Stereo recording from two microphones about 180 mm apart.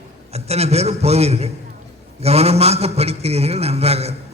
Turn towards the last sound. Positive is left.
turn(degrees=-35)  # may be behind; listen again after turning